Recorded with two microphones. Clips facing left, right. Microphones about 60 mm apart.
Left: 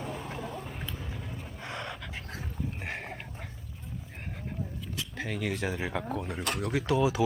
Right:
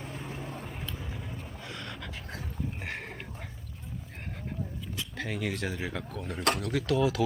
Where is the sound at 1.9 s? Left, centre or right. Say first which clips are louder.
Left 1 dB; centre.